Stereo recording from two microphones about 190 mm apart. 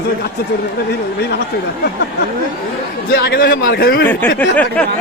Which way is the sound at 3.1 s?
60° left (ahead or behind).